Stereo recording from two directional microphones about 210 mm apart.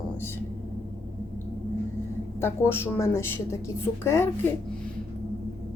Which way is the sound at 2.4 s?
10° left (ahead or behind).